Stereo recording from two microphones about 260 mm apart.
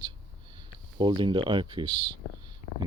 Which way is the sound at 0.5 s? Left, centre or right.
Centre.